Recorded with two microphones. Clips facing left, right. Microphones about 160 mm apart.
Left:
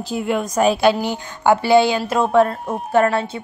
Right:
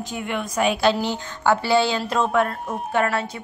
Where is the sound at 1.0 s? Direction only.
15° left (ahead or behind).